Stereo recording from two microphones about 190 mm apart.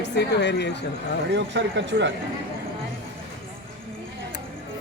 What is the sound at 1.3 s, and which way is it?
Speech, 70° right (ahead or behind).